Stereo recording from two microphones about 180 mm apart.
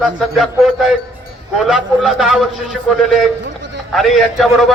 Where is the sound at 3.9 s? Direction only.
Centre (ahead or behind).